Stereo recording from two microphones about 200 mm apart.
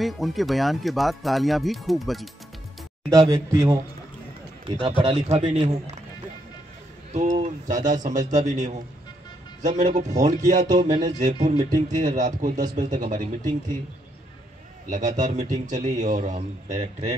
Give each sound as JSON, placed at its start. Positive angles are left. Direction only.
{"t": 0.0, "sound": "speech", "side_deg": 0}
{"t": 3.1, "sound": "a man's voice", "side_deg": -20}
{"t": 7.1, "sound": "a man's voice", "side_deg": -35}
{"t": 14.9, "sound": "a man's voice", "side_deg": -40}